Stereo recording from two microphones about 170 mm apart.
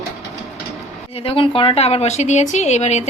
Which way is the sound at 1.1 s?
35° left (ahead or behind).